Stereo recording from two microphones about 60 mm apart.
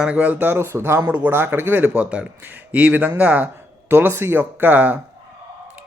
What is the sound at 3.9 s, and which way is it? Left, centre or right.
Speech, right.